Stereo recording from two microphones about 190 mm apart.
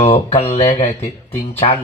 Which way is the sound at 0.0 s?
30° left (ahead or behind).